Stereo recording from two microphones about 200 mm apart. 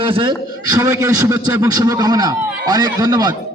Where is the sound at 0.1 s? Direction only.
25° right (ahead or behind).